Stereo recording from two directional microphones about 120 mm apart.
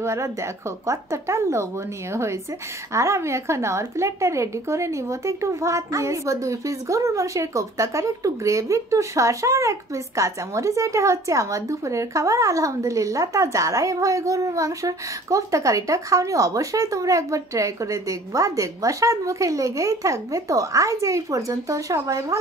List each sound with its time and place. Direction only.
0.0 s a woman's voice: 25° right (ahead or behind)
2.9 s a woman's voice: 25° right (ahead or behind)